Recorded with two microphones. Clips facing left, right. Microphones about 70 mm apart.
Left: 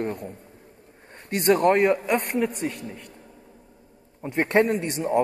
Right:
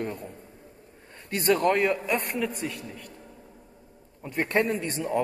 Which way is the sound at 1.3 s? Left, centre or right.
Left.